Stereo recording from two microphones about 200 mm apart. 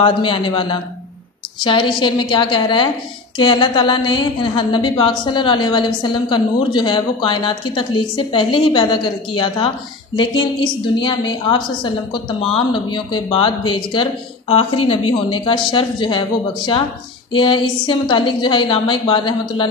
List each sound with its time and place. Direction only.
0.0 s a woman's voice: 25° left (ahead or behind)